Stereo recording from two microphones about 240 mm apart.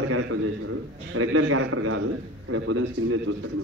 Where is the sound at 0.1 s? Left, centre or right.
Right.